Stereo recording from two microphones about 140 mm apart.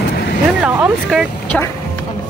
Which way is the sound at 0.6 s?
10° right (ahead or behind).